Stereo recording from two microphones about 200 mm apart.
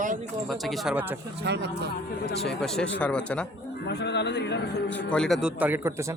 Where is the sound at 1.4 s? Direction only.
60° right (ahead or behind).